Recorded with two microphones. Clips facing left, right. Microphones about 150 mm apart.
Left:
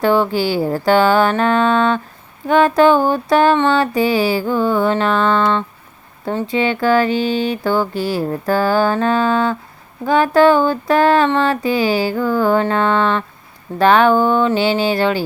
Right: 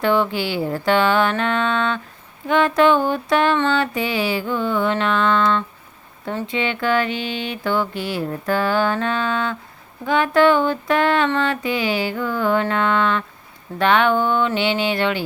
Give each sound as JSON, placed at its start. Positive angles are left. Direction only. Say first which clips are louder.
{"t": 0.0, "sound": "mantra", "louder": "left 4 dB", "side_deg": 35}